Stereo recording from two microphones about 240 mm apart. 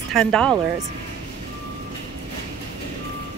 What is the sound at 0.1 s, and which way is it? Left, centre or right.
Speech, centre.